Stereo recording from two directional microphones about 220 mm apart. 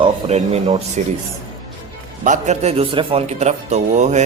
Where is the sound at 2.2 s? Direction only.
35° right (ahead or behind).